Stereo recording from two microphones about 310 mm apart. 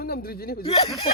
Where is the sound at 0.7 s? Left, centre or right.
Centre.